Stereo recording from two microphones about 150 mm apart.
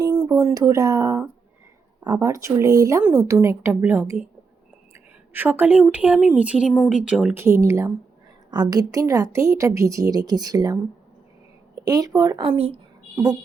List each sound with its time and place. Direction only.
0.0 s a woman's voice: 25° right (ahead or behind)
5.3 s speech: 10° right (ahead or behind)
7.3 s a woman's voice: 20° right (ahead or behind)
12.5 s speech: 40° right (ahead or behind)